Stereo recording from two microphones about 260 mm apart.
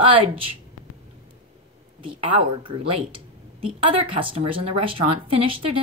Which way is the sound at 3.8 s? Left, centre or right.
Right.